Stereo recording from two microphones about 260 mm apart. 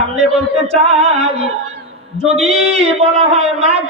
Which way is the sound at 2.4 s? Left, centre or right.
Right.